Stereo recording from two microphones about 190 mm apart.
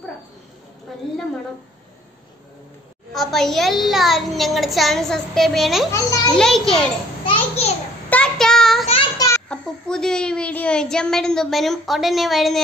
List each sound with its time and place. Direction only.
3.1 s a child's voice: centre (ahead or behind)
5.9 s a child's voice: 15° left (ahead or behind)
6.3 s a child's voice: centre (ahead or behind)
7.2 s a sound: 35° left (ahead or behind)
8.1 s child singing: 5° left (ahead or behind)
9.5 s a child's voice: 5° left (ahead or behind)